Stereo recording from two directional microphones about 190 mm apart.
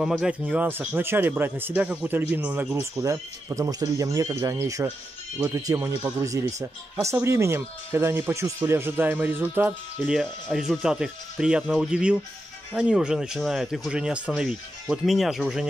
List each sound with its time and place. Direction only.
0.0 s speech: 5° right (ahead or behind)
7.0 s speech: 15° right (ahead or behind)